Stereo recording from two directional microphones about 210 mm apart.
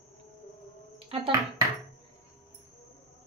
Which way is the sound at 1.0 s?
25° right (ahead or behind).